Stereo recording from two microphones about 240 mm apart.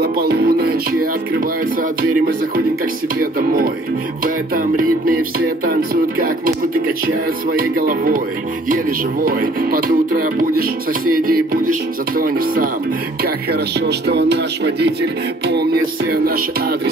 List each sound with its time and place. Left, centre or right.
0.0 s speech: right
7.5 s speech: right